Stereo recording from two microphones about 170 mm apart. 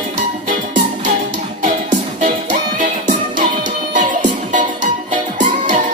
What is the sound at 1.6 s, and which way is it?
Music, 45° right (ahead or behind).